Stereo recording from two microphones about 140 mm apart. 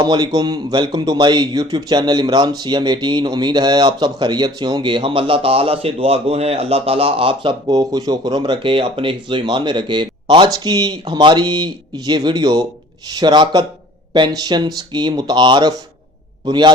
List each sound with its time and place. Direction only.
0.0 s speech: 30° right (ahead or behind)